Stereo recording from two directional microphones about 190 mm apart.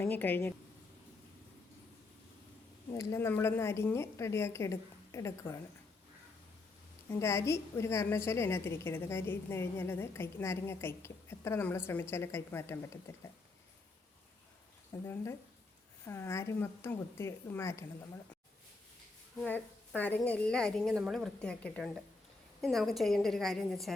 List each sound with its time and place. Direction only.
0.0 s a woman's voice: 10° left (ahead or behind)
2.9 s a woman's voice: 15° left (ahead or behind)
7.1 s a woman's voice: 15° left (ahead or behind)
15.0 s a woman's voice: 15° left (ahead or behind)
19.4 s a woman's voice: 5° left (ahead or behind)